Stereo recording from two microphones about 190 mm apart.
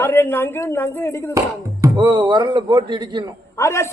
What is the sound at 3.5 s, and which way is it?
Speech, 15° left (ahead or behind).